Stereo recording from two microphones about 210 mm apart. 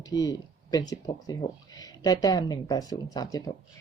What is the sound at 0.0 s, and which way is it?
Speech, 15° left (ahead or behind).